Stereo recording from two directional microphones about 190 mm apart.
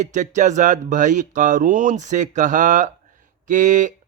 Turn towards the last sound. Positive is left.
turn(degrees=-40)  # may be behind; listen again after turning